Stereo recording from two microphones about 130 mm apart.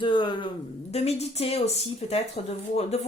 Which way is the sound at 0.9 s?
55° left (ahead or behind).